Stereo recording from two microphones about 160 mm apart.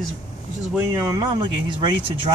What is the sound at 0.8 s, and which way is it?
Speech, 20° right (ahead or behind).